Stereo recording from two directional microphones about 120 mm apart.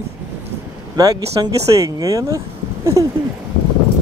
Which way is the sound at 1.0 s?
30° right (ahead or behind).